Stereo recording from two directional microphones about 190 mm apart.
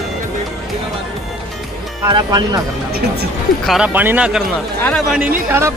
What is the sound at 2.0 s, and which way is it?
Speech, 20° right (ahead or behind).